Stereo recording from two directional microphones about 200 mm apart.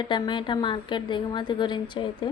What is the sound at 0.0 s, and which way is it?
Speech, 25° left (ahead or behind).